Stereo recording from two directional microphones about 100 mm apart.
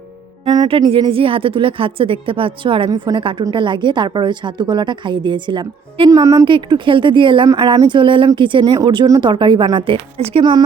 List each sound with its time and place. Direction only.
0.4 s music: 40° right (ahead or behind)
0.9 s speech: 65° right (ahead or behind)
2.9 s a woman's voice: 40° right (ahead or behind)
3.2 s a woman's voice: 60° right (ahead or behind)
6.1 s a woman's voice: 35° right (ahead or behind)
6.4 s a woman's voice: 50° right (ahead or behind); by 10.4 s 80° right